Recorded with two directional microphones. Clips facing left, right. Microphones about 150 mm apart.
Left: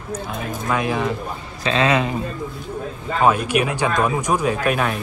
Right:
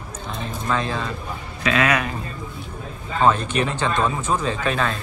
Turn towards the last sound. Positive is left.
turn(degrees=15)  # may be behind; listen again after turning